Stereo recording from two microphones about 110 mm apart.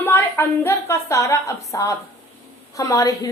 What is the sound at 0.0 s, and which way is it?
A woman's voice, 20° left (ahead or behind).